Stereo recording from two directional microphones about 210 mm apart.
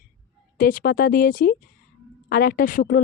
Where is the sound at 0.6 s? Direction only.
45° left (ahead or behind).